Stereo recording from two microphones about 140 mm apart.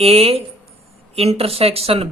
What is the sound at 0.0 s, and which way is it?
Speech, 45° right (ahead or behind).